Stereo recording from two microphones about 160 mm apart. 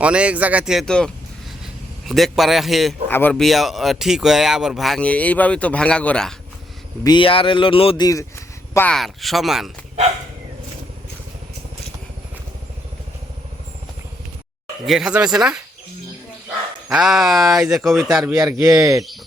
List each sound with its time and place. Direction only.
0.0 s speech: 5° right (ahead or behind)
3.1 s speech: 10° left (ahead or behind)
3.4 s speech: centre (ahead or behind)
7.0 s speech: 30° left (ahead or behind)
8.0 s speech: 20° left (ahead or behind)
9.0 s speech: centre (ahead or behind)
14.8 s speech: 5° right (ahead or behind)
16.9 s speech: centre (ahead or behind)
18.3 s speech: 20° right (ahead or behind)